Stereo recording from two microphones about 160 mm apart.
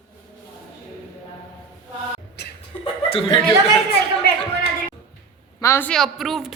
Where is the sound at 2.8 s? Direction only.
35° left (ahead or behind).